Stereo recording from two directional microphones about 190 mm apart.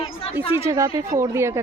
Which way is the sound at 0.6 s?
15° right (ahead or behind).